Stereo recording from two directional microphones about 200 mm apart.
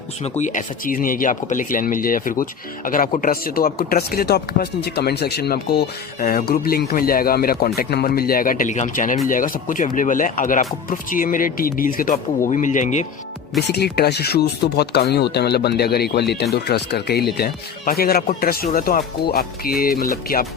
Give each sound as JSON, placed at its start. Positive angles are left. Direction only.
{"t": 0.3, "sound": "speech", "side_deg": 40}
{"t": 13.6, "sound": "speech", "side_deg": 55}